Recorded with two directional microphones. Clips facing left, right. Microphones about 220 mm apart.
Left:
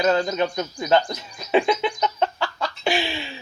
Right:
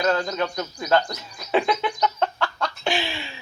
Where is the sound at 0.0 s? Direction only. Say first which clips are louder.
Left 3 dB; 25° left (ahead or behind).